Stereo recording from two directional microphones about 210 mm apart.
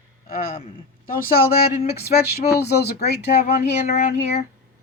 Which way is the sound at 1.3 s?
45° left (ahead or behind).